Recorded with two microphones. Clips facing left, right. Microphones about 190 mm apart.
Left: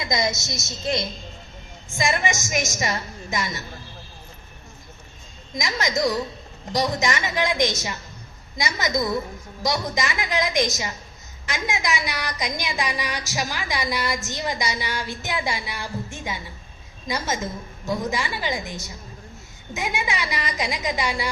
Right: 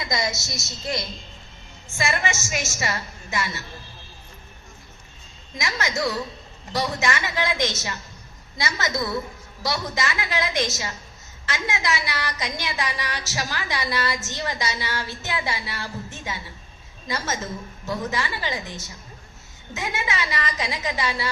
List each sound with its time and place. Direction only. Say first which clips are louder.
0.1 s a woman's voice: left 3 dB; 20° left (ahead or behind)
5.5 s a woman's voice: left 2 dB; 15° left (ahead or behind)